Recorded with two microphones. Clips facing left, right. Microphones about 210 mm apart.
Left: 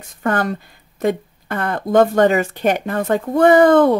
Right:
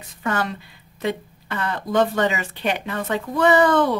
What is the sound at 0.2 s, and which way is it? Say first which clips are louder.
Speech: left 5 dB; 55° left (ahead or behind).